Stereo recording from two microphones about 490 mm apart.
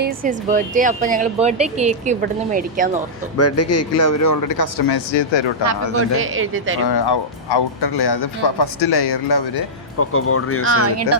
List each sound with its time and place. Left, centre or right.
0.0 s speech: centre
3.3 s speech: left
6.1 s speech: right
6.9 s speech: left
10.0 s speech: left
10.6 s speech: right